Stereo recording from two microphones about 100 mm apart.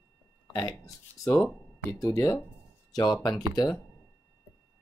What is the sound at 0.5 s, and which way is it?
Speech, 35° left (ahead or behind).